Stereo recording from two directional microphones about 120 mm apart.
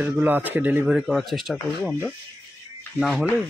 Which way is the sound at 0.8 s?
Centre (ahead or behind).